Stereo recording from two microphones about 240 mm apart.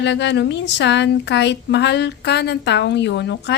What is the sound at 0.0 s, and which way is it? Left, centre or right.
Speech, left.